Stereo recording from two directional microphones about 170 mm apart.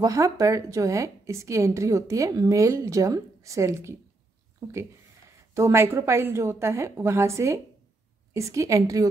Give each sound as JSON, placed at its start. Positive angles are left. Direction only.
{"t": 0.0, "sound": "a woman's voice", "side_deg": -20}
{"t": 5.5, "sound": "a woman's voice", "side_deg": -15}